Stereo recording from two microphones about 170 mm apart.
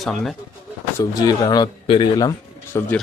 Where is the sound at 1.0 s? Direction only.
20° left (ahead or behind).